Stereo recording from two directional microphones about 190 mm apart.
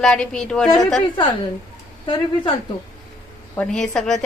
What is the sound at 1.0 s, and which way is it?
A woman's voice, 25° left (ahead or behind).